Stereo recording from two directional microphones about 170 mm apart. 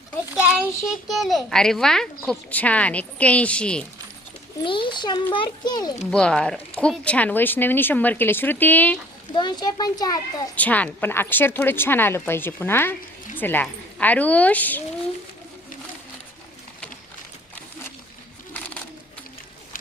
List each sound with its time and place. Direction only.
0.3 s a child's voice: 5° right (ahead or behind)
4.6 s a child's voice: 30° left (ahead or behind)
6.1 s a child's voice: 5° left (ahead or behind)
9.3 s a child's voice: 25° left (ahead or behind)
10.5 s a woman's voice: 10° left (ahead or behind)